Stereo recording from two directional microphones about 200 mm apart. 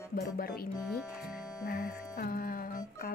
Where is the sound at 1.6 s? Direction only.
40° left (ahead or behind).